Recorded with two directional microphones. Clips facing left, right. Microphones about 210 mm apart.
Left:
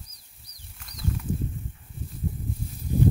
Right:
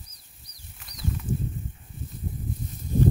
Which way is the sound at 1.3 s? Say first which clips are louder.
Even; 90° left.